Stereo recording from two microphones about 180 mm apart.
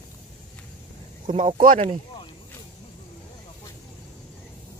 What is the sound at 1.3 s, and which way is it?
Speech, 30° right (ahead or behind).